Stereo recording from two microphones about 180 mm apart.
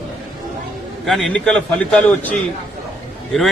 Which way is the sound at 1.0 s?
Centre (ahead or behind).